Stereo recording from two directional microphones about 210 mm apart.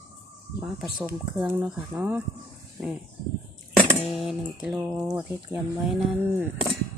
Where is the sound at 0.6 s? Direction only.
5° right (ahead or behind).